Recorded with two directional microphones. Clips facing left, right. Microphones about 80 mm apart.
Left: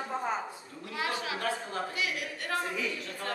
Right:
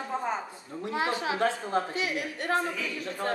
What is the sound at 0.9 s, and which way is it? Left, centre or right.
A woman's voice, right.